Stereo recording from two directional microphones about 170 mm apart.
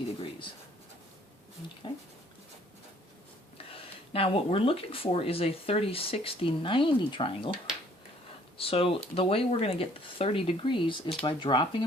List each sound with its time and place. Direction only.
4.1 s speech: 35° left (ahead or behind)
8.5 s speech: 35° left (ahead or behind)